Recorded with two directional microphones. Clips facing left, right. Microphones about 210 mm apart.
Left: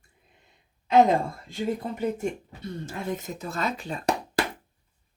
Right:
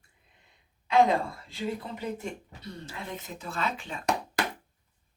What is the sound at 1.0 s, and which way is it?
Speech, 45° left (ahead or behind).